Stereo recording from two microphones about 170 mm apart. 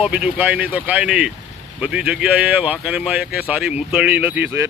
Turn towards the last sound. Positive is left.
turn(degrees=-10)  # may be behind; listen again after turning